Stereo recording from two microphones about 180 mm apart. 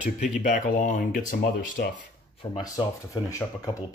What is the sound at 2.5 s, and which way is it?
Speech, 20° left (ahead or behind).